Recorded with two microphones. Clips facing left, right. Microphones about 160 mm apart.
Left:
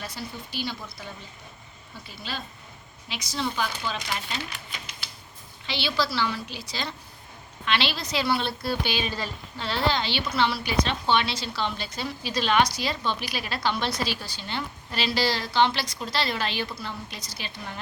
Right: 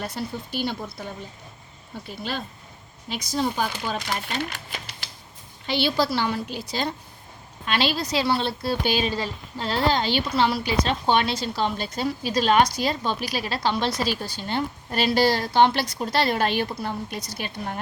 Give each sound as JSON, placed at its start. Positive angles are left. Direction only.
{"t": 0.0, "sound": "a woman's voice", "side_deg": -55}